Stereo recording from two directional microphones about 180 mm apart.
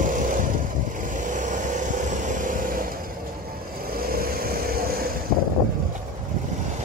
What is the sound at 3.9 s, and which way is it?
Vehicle, 55° right (ahead or behind).